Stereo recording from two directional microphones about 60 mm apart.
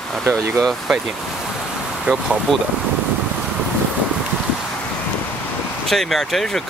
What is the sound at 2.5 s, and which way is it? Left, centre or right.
Speech, centre.